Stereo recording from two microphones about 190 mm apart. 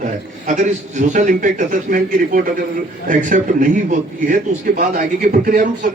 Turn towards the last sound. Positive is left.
turn(degrees=-50)  # may be behind; listen again after turning